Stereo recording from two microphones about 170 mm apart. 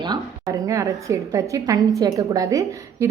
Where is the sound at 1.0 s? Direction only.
20° right (ahead or behind).